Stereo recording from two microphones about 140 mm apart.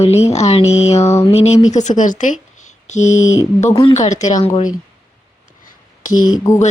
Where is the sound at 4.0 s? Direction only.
60° left (ahead or behind).